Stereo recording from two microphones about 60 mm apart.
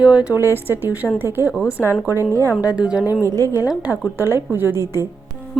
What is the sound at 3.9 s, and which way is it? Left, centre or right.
Speech, right.